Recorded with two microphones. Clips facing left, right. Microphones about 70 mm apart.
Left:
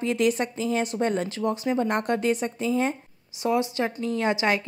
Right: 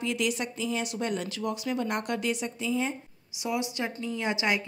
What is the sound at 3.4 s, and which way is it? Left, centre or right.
Speech, left.